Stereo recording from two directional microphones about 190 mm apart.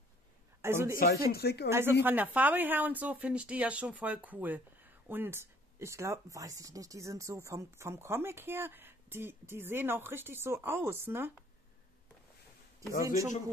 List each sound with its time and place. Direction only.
0.6 s a man's voice: 15° right (ahead or behind)
0.9 s speech: 55° left (ahead or behind)
1.7 s speech: 10° right (ahead or behind)
13.0 s speech: 15° right (ahead or behind)